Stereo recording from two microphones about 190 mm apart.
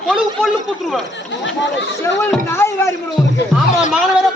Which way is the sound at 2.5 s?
15° left (ahead or behind).